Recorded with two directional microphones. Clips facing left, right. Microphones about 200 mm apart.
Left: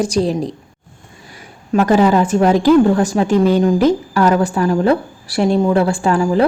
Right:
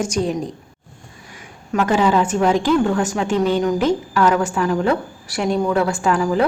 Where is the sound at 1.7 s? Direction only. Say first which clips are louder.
Left 4 dB; 40° left (ahead or behind).